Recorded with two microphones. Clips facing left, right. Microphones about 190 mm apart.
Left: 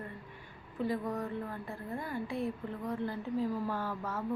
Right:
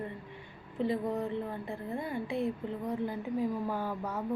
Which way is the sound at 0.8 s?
25° right (ahead or behind).